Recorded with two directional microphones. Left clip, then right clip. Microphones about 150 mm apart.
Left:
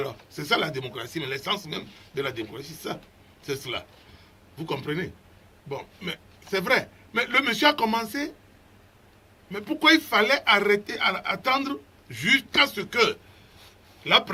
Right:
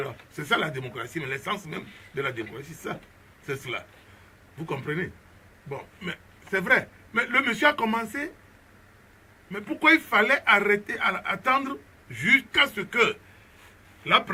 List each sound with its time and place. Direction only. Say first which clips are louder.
0.0 s speech: left 2 dB; 20° left (ahead or behind)
9.5 s speech: left 1 dB; 20° left (ahead or behind)